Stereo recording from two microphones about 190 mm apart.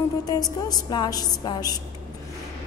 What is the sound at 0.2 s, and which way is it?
A woman's voice, 20° left (ahead or behind).